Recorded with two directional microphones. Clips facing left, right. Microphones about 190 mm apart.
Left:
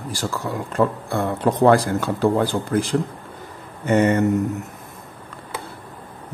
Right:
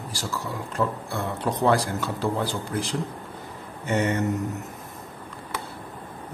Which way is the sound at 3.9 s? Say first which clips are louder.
Left 7 dB; 55° left (ahead or behind).